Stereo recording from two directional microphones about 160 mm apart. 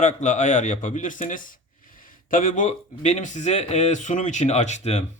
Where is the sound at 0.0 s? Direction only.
50° left (ahead or behind).